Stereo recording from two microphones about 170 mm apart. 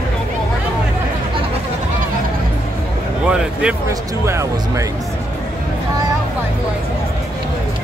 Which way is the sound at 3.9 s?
20° right (ahead or behind).